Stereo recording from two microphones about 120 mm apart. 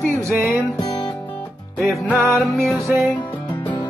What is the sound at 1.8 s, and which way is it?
Music, centre (ahead or behind).